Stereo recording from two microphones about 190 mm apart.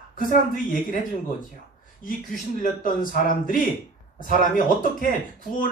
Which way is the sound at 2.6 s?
45° left (ahead or behind).